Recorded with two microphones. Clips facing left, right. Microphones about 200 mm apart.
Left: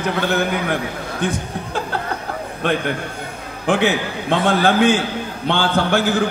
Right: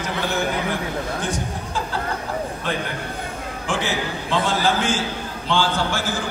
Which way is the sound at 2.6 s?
60° left (ahead or behind).